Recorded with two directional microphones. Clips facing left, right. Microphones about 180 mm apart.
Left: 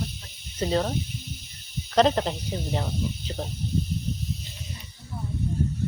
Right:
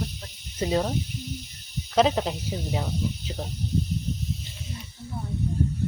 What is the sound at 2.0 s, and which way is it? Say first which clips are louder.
Speech: left 1 dB; 5° right (ahead or behind).